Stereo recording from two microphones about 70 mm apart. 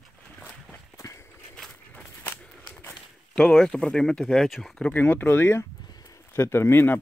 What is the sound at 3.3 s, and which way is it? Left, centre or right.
Speech, centre.